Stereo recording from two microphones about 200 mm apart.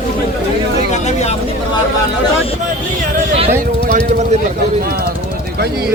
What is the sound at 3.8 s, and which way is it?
Speech, 40° right (ahead or behind).